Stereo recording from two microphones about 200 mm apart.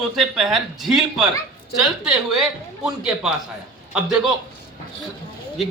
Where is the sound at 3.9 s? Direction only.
5° right (ahead or behind).